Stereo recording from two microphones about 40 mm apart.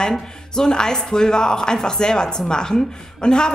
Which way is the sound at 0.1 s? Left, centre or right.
Centre.